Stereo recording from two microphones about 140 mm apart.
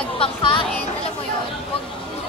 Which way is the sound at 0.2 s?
35° left (ahead or behind).